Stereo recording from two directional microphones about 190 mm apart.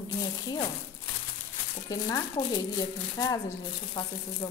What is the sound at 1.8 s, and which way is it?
Speech, 20° left (ahead or behind).